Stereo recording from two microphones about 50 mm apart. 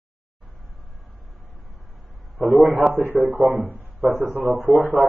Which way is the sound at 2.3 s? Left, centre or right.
Right.